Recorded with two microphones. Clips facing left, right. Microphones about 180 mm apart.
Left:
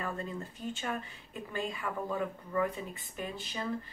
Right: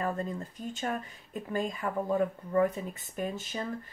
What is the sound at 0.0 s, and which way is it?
Speech, 40° right (ahead or behind).